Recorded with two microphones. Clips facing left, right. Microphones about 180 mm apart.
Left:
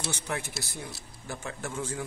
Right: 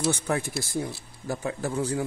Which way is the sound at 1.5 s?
35° right (ahead or behind).